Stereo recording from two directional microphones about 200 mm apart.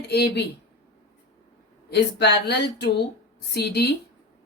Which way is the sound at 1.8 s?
55° left (ahead or behind).